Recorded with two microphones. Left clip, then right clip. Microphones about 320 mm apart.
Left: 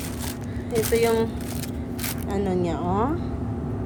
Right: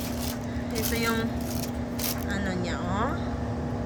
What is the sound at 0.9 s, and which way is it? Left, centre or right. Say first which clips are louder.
Speech: left 8 dB; centre.